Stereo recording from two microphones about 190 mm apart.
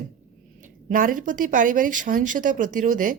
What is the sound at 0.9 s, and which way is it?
Speech, 45° right (ahead or behind).